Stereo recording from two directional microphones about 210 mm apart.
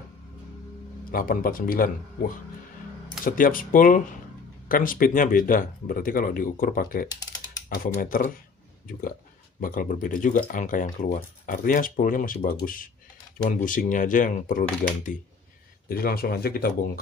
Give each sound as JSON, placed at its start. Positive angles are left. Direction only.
{"t": 1.1, "sound": "speech", "side_deg": 40}
{"t": 9.6, "sound": "speech", "side_deg": 40}